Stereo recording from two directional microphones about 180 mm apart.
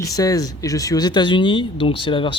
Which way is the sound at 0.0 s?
20° left (ahead or behind).